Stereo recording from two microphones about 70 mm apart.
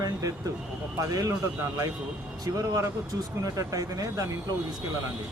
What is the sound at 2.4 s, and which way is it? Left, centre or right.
Speech, right.